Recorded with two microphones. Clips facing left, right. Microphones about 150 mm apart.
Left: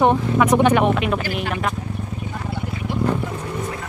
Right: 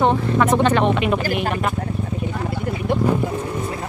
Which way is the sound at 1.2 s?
45° right (ahead or behind).